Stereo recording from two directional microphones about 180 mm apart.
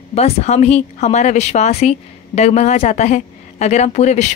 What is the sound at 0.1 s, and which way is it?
A woman's voice, 35° left (ahead or behind).